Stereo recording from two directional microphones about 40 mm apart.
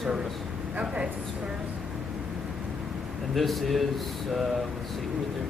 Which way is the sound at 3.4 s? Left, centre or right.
Centre.